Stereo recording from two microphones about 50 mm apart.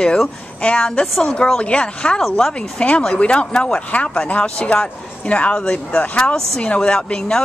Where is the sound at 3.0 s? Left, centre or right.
Centre.